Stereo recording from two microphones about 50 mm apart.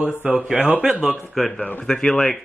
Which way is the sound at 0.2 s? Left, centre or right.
Right.